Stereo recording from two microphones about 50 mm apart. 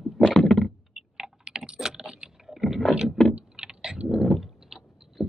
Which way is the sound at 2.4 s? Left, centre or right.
Centre.